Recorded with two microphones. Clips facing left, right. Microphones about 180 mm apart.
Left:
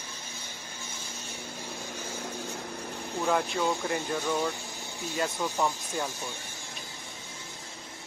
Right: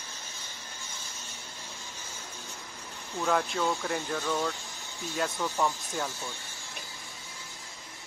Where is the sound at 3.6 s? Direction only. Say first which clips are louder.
Left 1 dB; 15° left (ahead or behind).